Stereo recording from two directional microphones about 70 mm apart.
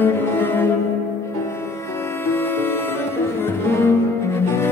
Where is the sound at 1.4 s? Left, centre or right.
Left.